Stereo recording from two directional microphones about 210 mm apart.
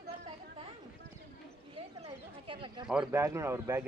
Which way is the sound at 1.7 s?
25° right (ahead or behind).